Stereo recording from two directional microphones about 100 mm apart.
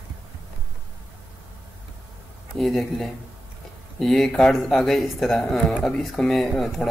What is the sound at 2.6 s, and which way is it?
Speech, centre (ahead or behind).